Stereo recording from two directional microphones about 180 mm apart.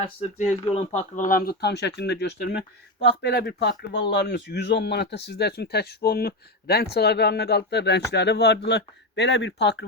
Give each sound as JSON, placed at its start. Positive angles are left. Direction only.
{"t": 0.0, "sound": "a man's voice", "side_deg": 40}